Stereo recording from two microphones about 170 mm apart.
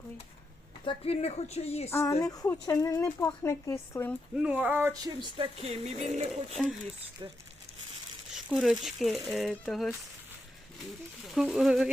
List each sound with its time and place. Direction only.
0.9 s speech: 35° left (ahead or behind)
1.9 s speech: 15° left (ahead or behind)
4.4 s speech: 10° right (ahead or behind)
5.4 s speech: 40° right (ahead or behind)
8.4 s speech: 5° right (ahead or behind)
11.3 s speech: centre (ahead or behind)